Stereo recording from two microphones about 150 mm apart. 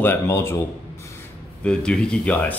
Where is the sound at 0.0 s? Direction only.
15° left (ahead or behind).